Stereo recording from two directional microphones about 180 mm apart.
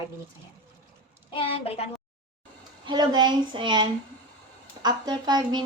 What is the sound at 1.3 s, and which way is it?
Speech, 30° left (ahead or behind).